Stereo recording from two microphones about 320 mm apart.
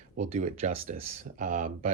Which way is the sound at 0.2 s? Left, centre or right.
Right.